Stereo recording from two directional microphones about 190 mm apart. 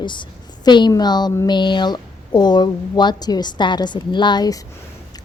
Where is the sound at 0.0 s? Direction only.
25° left (ahead or behind).